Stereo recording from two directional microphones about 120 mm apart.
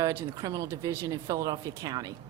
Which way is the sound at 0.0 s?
25° right (ahead or behind).